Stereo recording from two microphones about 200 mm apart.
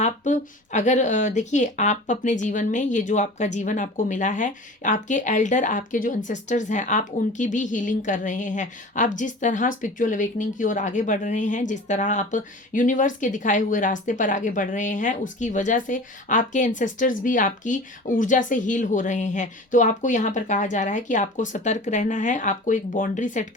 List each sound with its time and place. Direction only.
0.0 s speech: 35° left (ahead or behind)